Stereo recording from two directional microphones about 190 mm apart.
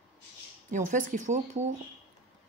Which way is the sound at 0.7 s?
40° right (ahead or behind).